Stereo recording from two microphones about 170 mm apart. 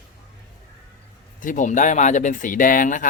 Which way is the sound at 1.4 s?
50° left (ahead or behind).